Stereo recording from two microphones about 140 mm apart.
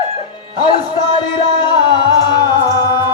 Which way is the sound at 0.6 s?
30° left (ahead or behind).